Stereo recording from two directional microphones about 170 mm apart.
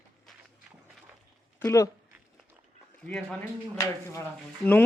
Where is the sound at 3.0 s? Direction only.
5° left (ahead or behind).